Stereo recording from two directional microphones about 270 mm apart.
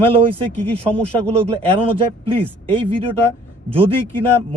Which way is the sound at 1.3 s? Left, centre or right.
Centre.